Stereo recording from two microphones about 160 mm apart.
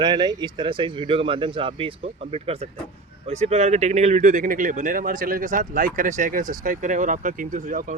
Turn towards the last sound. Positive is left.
turn(degrees=-55)  # may be behind; listen again after turning